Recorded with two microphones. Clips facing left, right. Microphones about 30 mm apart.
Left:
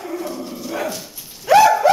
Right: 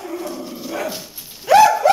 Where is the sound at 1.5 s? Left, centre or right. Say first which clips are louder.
Even; centre.